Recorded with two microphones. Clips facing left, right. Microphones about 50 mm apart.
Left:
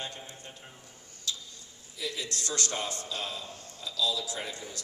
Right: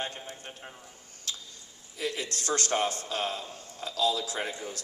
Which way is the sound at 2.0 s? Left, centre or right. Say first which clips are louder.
Right 3 dB; right.